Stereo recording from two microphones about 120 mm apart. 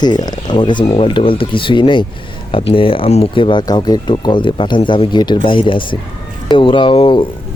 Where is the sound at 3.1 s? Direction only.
60° left (ahead or behind).